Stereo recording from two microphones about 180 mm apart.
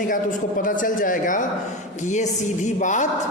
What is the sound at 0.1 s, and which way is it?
Speech, 50° left (ahead or behind).